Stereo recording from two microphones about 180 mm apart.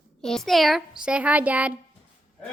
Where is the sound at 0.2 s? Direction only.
Centre (ahead or behind).